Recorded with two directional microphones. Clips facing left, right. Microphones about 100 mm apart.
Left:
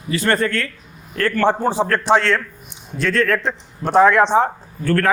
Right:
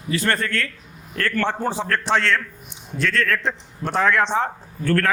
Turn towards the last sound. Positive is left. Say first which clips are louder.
# left 3 dB
turn(degrees=15)  # may be behind; listen again after turning